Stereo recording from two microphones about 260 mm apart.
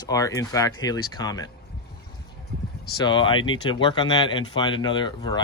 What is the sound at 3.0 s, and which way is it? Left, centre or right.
Speech, centre.